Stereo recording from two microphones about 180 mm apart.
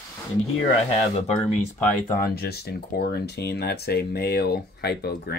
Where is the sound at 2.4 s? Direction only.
60° left (ahead or behind).